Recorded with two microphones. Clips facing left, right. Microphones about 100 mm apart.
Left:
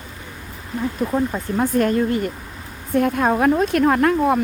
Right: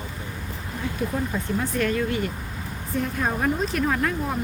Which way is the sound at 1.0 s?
45° left (ahead or behind).